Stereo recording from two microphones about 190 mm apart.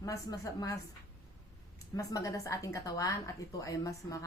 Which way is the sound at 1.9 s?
15° left (ahead or behind).